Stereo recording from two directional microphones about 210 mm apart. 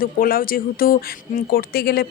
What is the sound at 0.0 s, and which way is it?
A woman's voice, 45° left (ahead or behind).